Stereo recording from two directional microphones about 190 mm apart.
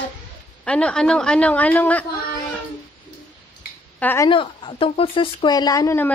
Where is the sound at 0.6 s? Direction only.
5° left (ahead or behind).